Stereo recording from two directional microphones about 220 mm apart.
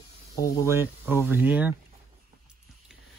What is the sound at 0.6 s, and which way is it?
Speech, 10° right (ahead or behind).